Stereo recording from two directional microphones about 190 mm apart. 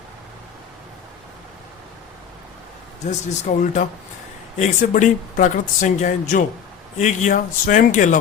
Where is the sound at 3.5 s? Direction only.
45° left (ahead or behind).